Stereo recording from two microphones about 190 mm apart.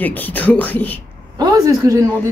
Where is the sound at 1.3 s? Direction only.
20° right (ahead or behind).